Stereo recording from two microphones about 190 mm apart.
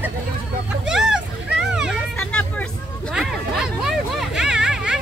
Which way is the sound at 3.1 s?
Centre (ahead or behind).